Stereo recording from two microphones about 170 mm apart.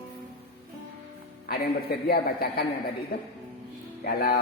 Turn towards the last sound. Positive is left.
turn(degrees=60)  # may be behind; listen again after turning